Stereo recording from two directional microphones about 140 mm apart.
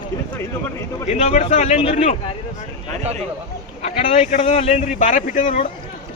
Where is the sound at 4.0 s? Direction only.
70° left (ahead or behind).